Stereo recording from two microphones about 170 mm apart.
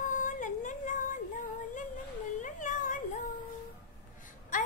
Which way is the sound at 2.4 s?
50° left (ahead or behind).